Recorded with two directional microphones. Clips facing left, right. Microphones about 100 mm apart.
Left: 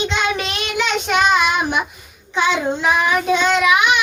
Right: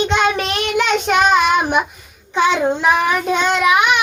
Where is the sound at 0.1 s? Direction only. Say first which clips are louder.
Right 4 dB; 45° right (ahead or behind).